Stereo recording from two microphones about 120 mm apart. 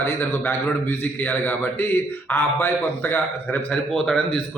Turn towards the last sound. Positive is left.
turn(degrees=15)  # may be behind; listen again after turning